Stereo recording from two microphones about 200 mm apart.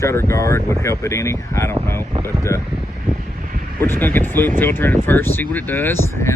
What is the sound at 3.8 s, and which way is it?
Speech, 10° left (ahead or behind).